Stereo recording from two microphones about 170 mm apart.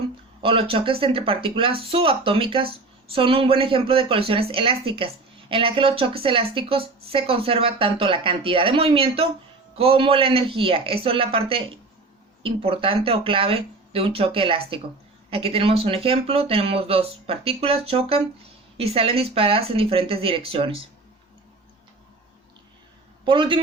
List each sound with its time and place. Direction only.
0.4 s speech: 30° right (ahead or behind)
23.2 s a man's voice: 30° right (ahead or behind)